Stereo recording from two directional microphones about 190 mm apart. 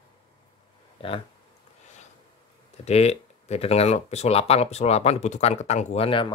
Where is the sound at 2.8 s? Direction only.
35° left (ahead or behind).